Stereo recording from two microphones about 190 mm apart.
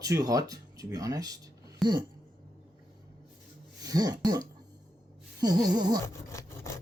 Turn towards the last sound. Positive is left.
turn(degrees=15)  # may be behind; listen again after turning